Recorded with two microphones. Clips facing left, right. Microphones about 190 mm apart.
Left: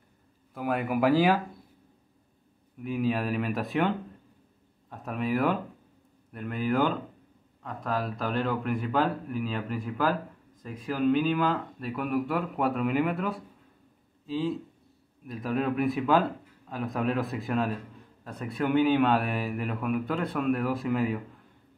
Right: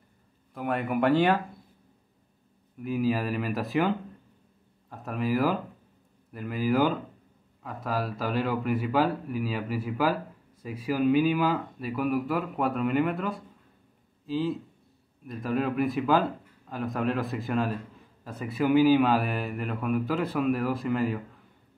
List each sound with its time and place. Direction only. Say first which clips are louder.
0.6 s a man's voice: even; centre (ahead or behind)
2.8 s a man's voice: right 1 dB; centre (ahead or behind)